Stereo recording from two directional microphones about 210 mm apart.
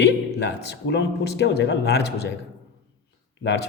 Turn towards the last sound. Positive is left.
turn(degrees=55)  # may be behind; listen again after turning